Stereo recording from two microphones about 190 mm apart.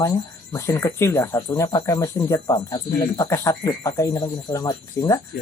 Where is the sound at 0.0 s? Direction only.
15° left (ahead or behind).